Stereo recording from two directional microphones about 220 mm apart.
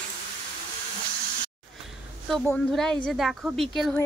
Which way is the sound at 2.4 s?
5° left (ahead or behind).